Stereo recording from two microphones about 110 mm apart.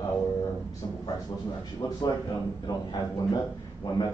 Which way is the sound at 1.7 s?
30° left (ahead or behind).